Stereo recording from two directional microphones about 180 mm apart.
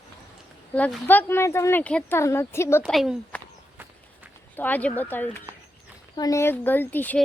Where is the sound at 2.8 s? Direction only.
Centre (ahead or behind).